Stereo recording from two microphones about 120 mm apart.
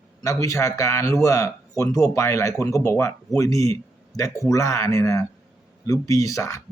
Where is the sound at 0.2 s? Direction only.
25° left (ahead or behind).